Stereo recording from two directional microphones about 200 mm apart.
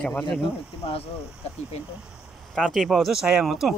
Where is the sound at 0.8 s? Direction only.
30° left (ahead or behind).